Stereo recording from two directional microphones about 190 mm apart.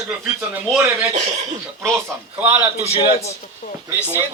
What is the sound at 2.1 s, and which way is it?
Speech, 15° right (ahead or behind).